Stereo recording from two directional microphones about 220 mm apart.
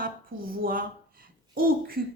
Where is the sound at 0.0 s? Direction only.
40° right (ahead or behind).